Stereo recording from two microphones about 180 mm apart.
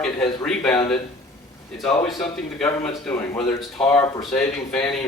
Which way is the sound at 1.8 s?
Centre (ahead or behind).